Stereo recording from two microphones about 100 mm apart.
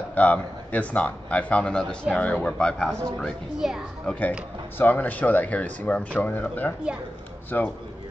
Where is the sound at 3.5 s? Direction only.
5° right (ahead or behind).